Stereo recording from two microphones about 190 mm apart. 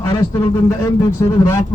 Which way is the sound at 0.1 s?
20° left (ahead or behind).